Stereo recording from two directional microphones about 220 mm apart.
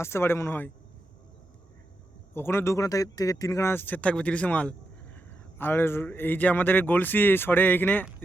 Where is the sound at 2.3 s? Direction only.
10° left (ahead or behind).